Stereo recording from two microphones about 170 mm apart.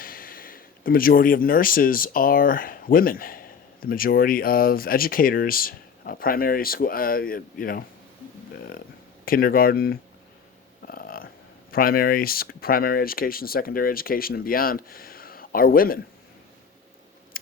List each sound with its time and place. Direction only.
0.0 s speech: 55° left (ahead or behind)
9.2 s speech: 60° left (ahead or behind)
10.8 s a sound: 60° left (ahead or behind)
11.7 s speech: 60° left (ahead or behind)
17.3 s scissors: 60° left (ahead or behind)